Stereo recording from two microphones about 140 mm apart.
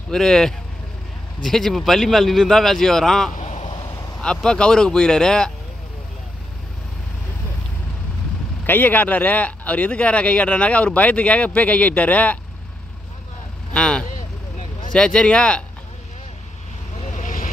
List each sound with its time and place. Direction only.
0.1 s a man's voice: 5° left (ahead or behind)
3.3 s a sound: 55° left (ahead or behind)
4.2 s a man's voice: 5° left (ahead or behind)
8.6 s speech: 15° left (ahead or behind)
13.7 s vehicle: 5° left (ahead or behind)
15.0 s speech: 5° left (ahead or behind)
17.1 s vehicle: 65° left (ahead or behind)